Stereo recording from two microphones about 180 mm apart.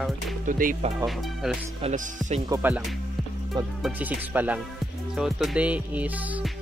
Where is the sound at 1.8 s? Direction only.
40° right (ahead or behind).